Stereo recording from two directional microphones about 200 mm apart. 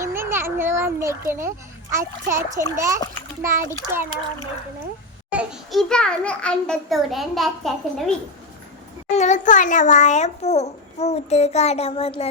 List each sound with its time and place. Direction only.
0.0 s a child's voice: 10° right (ahead or behind)
9.0 s a child's voice: 35° left (ahead or behind)